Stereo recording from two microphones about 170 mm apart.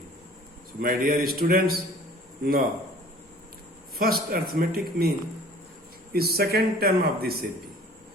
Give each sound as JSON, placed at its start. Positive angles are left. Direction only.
{"t": 0.8, "sound": "a man's voice", "side_deg": -60}
{"t": 3.9, "sound": "a man's voice", "side_deg": -60}
{"t": 6.1, "sound": "a man's voice", "side_deg": -65}